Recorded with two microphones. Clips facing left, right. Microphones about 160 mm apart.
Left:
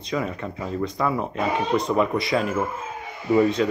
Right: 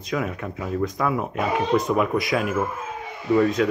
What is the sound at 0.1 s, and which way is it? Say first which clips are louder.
Speech: even; 5° right (ahead or behind).